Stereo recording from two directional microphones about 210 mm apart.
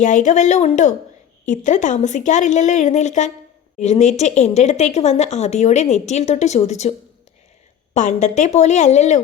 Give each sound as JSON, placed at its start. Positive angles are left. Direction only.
{"t": 0.0, "sound": "speech", "side_deg": 35}
{"t": 7.9, "sound": "speech", "side_deg": 35}